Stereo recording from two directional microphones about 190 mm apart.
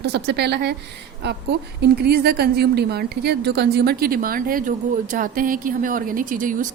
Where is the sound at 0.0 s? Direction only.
60° right (ahead or behind).